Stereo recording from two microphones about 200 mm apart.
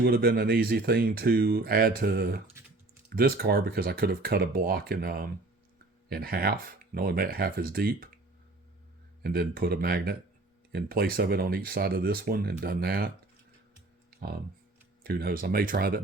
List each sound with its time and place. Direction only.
0.0 s speech: 50° right (ahead or behind)
9.2 s speech: 50° right (ahead or behind)
15.0 s speech: 50° right (ahead or behind)